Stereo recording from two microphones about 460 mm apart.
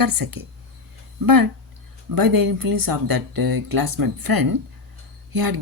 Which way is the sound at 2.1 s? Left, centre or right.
Right.